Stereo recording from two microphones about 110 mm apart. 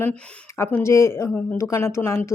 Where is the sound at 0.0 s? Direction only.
20° left (ahead or behind).